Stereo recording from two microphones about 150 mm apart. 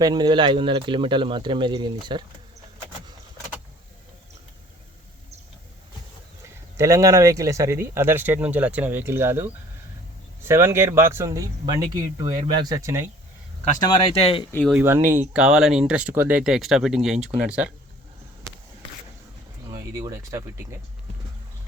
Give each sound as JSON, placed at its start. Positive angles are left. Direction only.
{"t": 0.0, "sound": "speech", "side_deg": -30}
{"t": 6.7, "sound": "speech", "side_deg": -20}
{"t": 13.7, "sound": "speech", "side_deg": 35}
{"t": 14.6, "sound": "speech", "side_deg": -10}
{"t": 19.7, "sound": "speech", "side_deg": -20}